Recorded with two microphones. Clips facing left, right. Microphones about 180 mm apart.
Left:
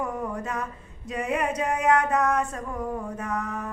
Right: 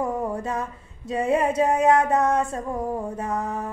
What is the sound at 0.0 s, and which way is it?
Speech, 25° right (ahead or behind).